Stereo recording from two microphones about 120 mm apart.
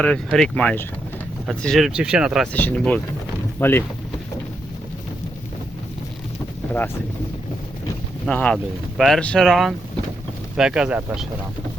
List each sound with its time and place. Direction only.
0.3 s speech: 5° left (ahead or behind)
2.5 s speech: 15° left (ahead or behind)
8.3 s speech: 10° left (ahead or behind); by 11.3 s 10° right (ahead or behind)